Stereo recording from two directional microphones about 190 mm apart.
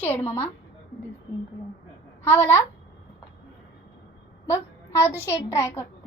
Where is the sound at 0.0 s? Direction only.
10° left (ahead or behind).